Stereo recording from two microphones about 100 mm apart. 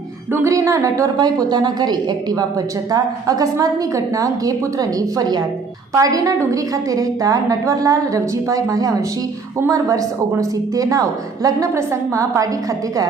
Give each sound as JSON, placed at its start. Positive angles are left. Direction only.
{"t": 0.4, "sound": "a woman's voice", "side_deg": -30}